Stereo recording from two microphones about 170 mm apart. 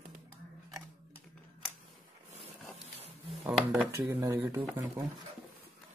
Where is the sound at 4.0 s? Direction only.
20° right (ahead or behind).